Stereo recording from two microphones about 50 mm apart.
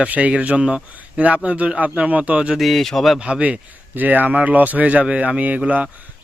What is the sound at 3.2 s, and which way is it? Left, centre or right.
Speech, right.